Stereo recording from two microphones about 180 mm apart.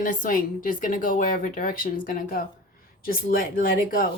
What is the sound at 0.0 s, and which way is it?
A woman's voice, 50° left (ahead or behind).